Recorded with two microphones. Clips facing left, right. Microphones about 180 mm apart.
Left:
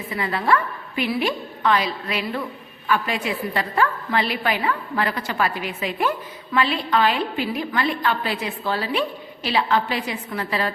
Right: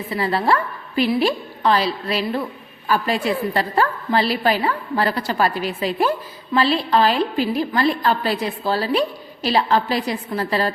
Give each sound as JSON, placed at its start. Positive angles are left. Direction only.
{"t": 0.1, "sound": "a woman's voice", "side_deg": -35}